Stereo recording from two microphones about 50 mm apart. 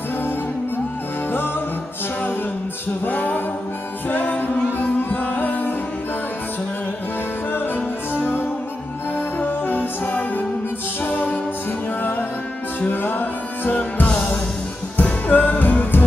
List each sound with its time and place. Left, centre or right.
3.1 s music: left
7.5 s music: left
9.4 s music: left
12.8 s music: left